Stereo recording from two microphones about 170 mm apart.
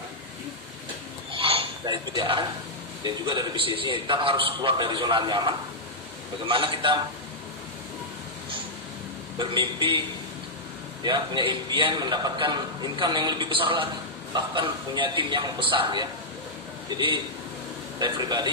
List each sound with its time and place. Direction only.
1.3 s a sound: 30° right (ahead or behind)
3.0 s a man's voice: 25° right (ahead or behind)
9.4 s a man's voice: 30° right (ahead or behind)
11.1 s a man's voice: 25° right (ahead or behind)